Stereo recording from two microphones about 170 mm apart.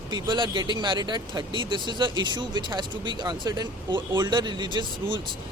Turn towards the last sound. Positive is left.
turn(degrees=-30)  # may be behind; listen again after turning